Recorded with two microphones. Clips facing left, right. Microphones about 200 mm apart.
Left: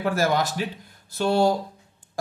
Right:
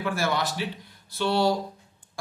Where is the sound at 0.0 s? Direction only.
40° left (ahead or behind).